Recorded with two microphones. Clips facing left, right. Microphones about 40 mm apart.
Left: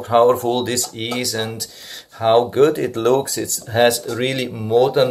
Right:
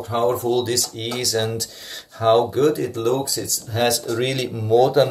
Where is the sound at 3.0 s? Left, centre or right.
Left.